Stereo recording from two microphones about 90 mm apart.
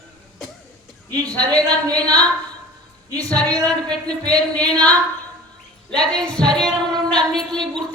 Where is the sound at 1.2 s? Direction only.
45° right (ahead or behind).